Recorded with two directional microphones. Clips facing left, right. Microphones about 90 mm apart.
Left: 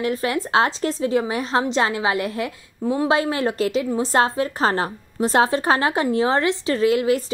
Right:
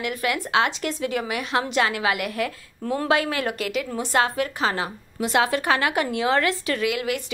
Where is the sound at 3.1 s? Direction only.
30° left (ahead or behind).